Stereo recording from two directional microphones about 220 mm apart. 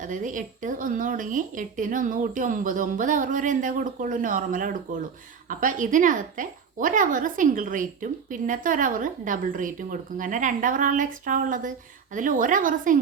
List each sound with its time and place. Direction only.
0.0 s a woman's voice: 35° right (ahead or behind)